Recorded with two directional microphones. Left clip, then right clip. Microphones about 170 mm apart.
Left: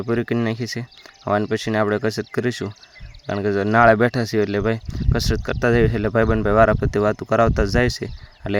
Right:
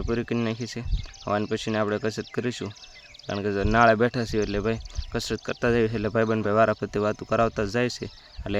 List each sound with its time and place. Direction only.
0.0 s speech: 30° left (ahead or behind)